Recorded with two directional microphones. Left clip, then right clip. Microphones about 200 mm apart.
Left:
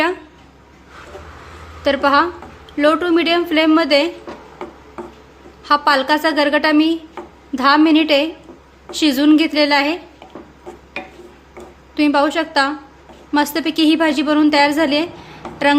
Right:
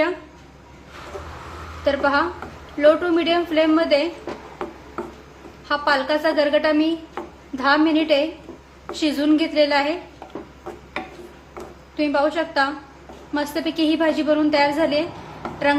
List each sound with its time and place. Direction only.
1.8 s a woman's voice: 60° left (ahead or behind)
5.6 s a woman's voice: 60° left (ahead or behind)
11.9 s a woman's voice: 60° left (ahead or behind)